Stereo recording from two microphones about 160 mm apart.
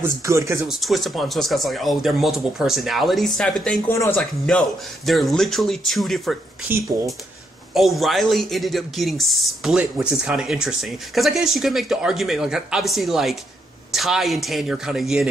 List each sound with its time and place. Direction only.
0.0 s speech: 20° right (ahead or behind)
0.7 s speech: centre (ahead or behind)
3.9 s speech: 20° left (ahead or behind)
4.2 s speech: 5° left (ahead or behind)
7.7 s speech: centre (ahead or behind)